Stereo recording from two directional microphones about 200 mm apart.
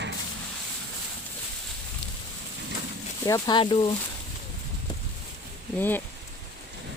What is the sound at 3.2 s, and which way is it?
Speech, 20° left (ahead or behind).